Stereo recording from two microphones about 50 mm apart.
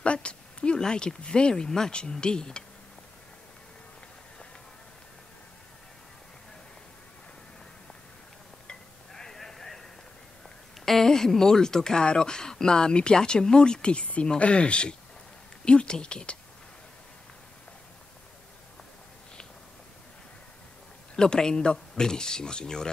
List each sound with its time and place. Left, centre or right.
0.0 s speech: left
8.6 s a sound: centre
10.9 s speech: centre
21.2 s speech: centre